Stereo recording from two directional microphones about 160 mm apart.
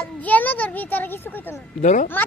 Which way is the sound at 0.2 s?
10° left (ahead or behind).